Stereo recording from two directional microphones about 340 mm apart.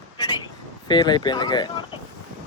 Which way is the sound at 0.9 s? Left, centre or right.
Centre.